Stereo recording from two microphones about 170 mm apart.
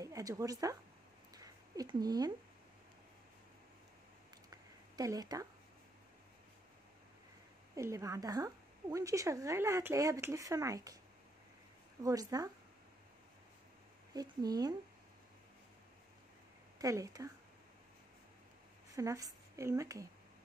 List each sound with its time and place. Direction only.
0.0 s speech: 20° right (ahead or behind)
1.3 s a sound: 20° right (ahead or behind)
4.5 s a sound: 20° right (ahead or behind)
7.7 s a woman's voice: 20° right (ahead or behind)
12.0 s a woman's voice: 20° right (ahead or behind)
14.1 s a woman's voice: 20° right (ahead or behind)
16.7 s speech: 20° right (ahead or behind)
18.9 s speech: 20° right (ahead or behind)